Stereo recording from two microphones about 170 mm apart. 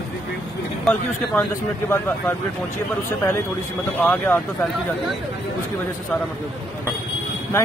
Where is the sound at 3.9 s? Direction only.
10° left (ahead or behind).